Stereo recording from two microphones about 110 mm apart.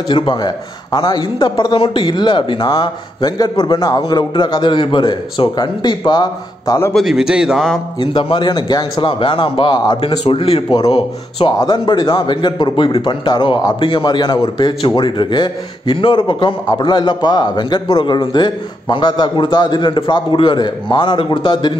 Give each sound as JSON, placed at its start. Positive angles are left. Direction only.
{"t": 0.1, "sound": "speech", "side_deg": 45}
{"t": 6.9, "sound": "a man's voice", "side_deg": 0}
{"t": 8.0, "sound": "speech", "side_deg": 50}
{"t": 10.3, "sound": "speech", "side_deg": 60}
{"t": 11.5, "sound": "speech", "side_deg": 40}